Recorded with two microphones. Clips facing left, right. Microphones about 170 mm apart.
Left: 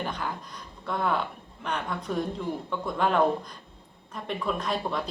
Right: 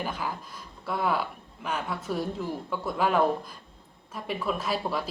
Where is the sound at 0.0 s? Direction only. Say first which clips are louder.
Even; 5° right (ahead or behind).